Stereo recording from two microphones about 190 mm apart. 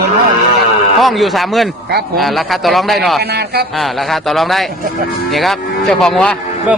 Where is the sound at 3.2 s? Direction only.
60° right (ahead or behind).